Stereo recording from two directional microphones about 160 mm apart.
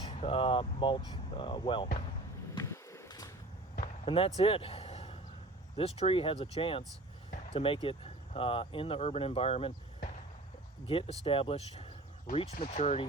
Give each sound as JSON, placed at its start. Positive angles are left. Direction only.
{"t": 0.1, "sound": "speech", "side_deg": 40}
{"t": 2.6, "sound": "a sound", "side_deg": 20}
{"t": 4.0, "sound": "speech", "side_deg": 35}
{"t": 4.4, "sound": "a sound", "side_deg": 35}
{"t": 5.7, "sound": "speech", "side_deg": 40}
{"t": 10.8, "sound": "speech", "side_deg": 35}